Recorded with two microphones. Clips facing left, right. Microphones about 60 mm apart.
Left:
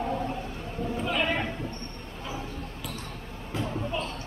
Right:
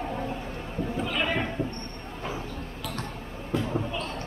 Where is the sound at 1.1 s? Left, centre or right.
Centre.